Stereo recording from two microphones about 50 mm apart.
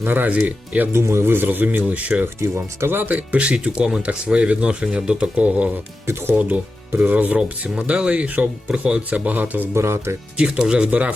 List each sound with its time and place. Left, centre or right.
0.0 s speech: right
0.9 s speech: right
1.2 s speech: right
1.8 s speech: right
2.6 s speech: right
3.1 s speech: right
6.1 s speech: right
6.3 s speech: right; by 9.0 s centre
9.0 s speech: right
9.7 s speech: right
10.3 s speech: right